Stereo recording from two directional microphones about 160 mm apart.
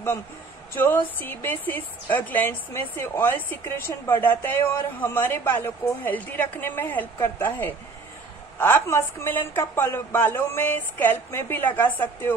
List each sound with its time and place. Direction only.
0.7 s a woman's voice: 15° left (ahead or behind)